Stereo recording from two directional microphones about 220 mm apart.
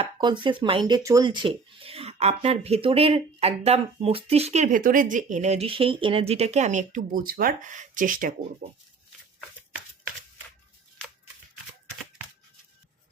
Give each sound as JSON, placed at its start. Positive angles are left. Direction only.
{"t": 0.0, "sound": "speech", "side_deg": -20}